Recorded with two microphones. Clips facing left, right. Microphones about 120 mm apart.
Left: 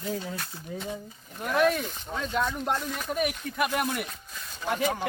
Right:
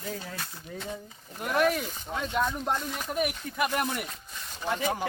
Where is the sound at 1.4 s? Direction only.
10° right (ahead or behind).